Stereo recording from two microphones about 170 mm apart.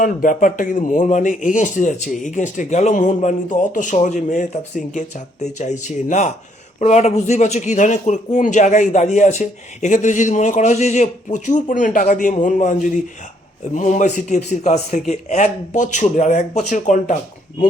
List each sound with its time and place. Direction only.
0.0 s speech: 55° left (ahead or behind)